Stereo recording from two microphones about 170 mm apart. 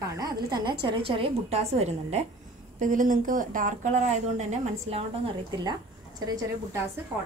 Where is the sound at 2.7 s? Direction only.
50° right (ahead or behind).